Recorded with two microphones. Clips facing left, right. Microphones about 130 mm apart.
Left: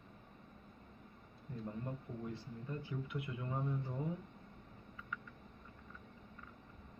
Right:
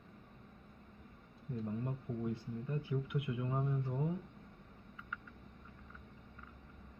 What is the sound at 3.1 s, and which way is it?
Speech, 15° right (ahead or behind).